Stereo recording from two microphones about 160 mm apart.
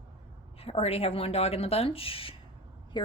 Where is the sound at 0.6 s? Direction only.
40° left (ahead or behind).